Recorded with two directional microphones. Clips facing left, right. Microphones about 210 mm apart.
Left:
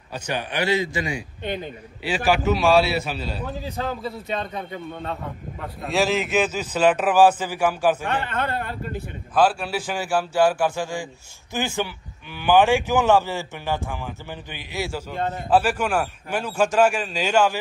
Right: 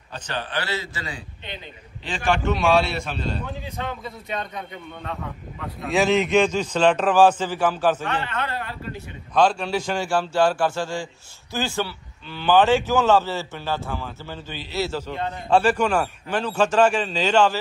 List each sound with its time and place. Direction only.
0.1 s speech: 15° left (ahead or behind)
1.4 s speech: 50° left (ahead or behind)
2.0 s a man's voice: 5° left (ahead or behind)
3.6 s a man's voice: 35° left (ahead or behind)
5.9 s speech: centre (ahead or behind)
8.3 s speech: 50° left (ahead or behind)
9.3 s speech: 5° left (ahead or behind)
15.1 s speech: 45° left (ahead or behind)
15.5 s speech: 10° left (ahead or behind)